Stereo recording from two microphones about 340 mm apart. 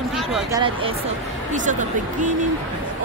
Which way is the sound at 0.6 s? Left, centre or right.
Centre.